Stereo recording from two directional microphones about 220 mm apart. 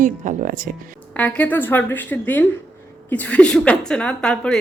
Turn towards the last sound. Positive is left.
turn(degrees=5)  # may be behind; listen again after turning